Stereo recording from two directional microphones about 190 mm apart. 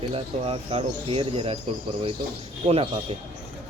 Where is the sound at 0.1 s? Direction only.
30° right (ahead or behind).